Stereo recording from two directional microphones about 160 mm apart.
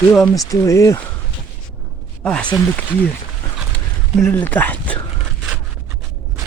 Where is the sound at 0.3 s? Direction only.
20° left (ahead or behind).